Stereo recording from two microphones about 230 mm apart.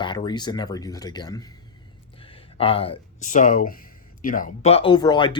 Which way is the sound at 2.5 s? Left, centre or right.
Left.